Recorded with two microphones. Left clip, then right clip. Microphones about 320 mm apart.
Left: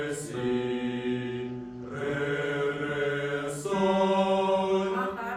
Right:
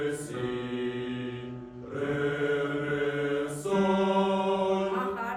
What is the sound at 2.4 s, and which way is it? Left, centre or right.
Mantra, left.